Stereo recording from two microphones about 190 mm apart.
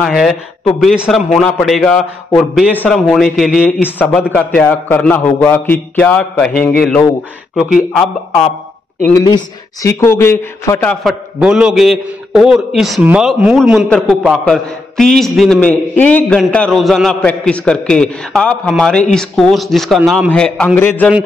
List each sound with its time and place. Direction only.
0.0 s a man's voice: centre (ahead or behind)
7.5 s a man's voice: centre (ahead or behind)
9.8 s a man's voice: 15° left (ahead or behind)
11.3 s a man's voice: 5° right (ahead or behind); by 21.1 s 10° left (ahead or behind)